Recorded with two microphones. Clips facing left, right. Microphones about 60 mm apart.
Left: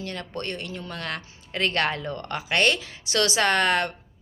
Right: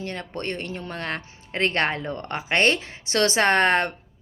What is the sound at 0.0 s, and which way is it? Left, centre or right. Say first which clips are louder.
A woman's voice: right 2 dB; right.